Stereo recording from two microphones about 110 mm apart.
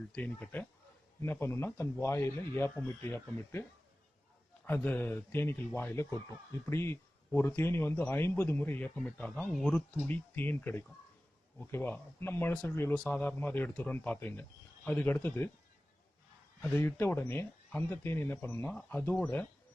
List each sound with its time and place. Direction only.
0.1 s a man's voice: 15° left (ahead or behind)
4.6 s a man's voice: 15° left (ahead or behind)
9.9 s a man's voice: 20° left (ahead or behind)
16.6 s a man's voice: 15° left (ahead or behind)